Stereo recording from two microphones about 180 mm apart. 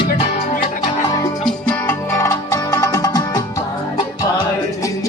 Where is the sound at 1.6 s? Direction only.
10° left (ahead or behind).